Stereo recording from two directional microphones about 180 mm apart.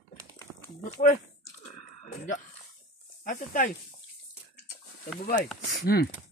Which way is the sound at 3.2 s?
50° left (ahead or behind).